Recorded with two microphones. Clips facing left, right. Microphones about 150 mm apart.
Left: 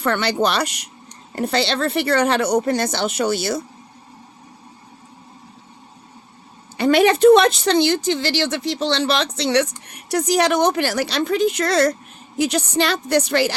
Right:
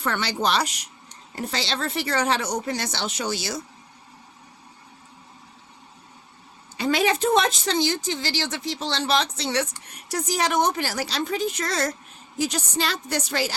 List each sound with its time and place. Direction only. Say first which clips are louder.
0.0 s speech: left 6 dB; 65° left (ahead or behind)
6.7 s speech: left 7 dB; 65° left (ahead or behind)